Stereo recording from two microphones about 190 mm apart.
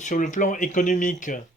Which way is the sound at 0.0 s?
40° left (ahead or behind).